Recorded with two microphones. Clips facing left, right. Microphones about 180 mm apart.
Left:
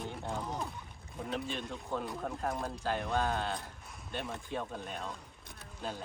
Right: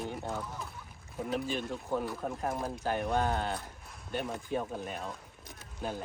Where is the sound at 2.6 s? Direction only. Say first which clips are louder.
Right 2 dB; 20° right (ahead or behind).